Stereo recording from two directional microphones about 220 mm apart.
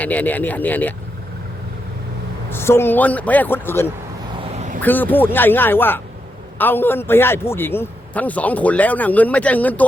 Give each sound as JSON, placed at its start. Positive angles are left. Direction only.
{"t": 0.0, "sound": "a man's voice", "side_deg": 5}
{"t": 2.5, "sound": "a man's voice", "side_deg": 10}
{"t": 4.5, "sound": "a sound", "side_deg": -30}
{"t": 4.8, "sound": "a man's voice", "side_deg": 10}